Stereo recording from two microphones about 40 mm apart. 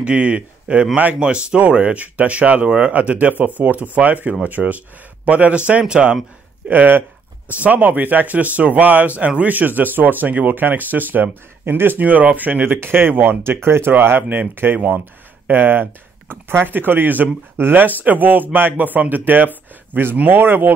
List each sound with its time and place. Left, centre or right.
0.0 s a man's voice: right
6.7 s speech: right
11.6 s speech: right
12.0 s speech: right
12.8 s speech: right
15.4 s speech: right
20.2 s speech: right